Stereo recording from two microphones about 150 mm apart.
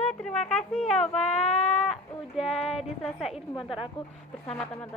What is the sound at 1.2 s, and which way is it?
Speech, 45° left (ahead or behind).